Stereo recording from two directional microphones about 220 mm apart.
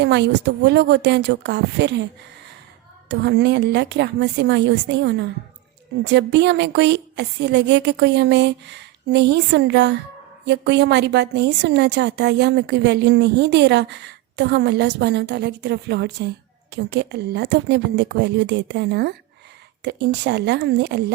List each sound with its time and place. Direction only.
0.0 s a woman's voice: 50° right (ahead or behind)
3.1 s a woman's voice: 50° right (ahead or behind)